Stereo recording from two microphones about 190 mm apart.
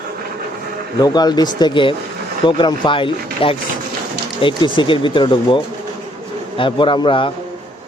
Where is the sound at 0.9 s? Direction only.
20° left (ahead or behind).